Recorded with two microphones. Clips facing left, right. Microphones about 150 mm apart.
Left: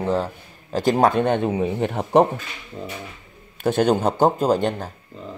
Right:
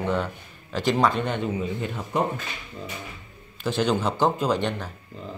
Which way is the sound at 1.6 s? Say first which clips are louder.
Left 7 dB; 65° left (ahead or behind).